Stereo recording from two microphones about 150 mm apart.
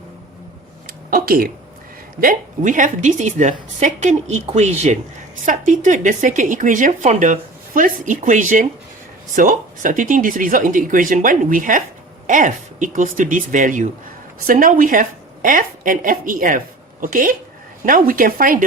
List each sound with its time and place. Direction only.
1.1 s speech: 80° right
2.2 s a woman's voice: 60° right (ahead or behind)